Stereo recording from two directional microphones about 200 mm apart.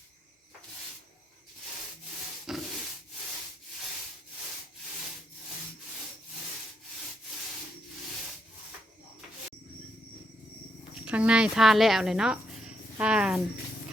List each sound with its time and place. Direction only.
2.5 s rub: centre (ahead or behind)
11.0 s speech: 5° right (ahead or behind)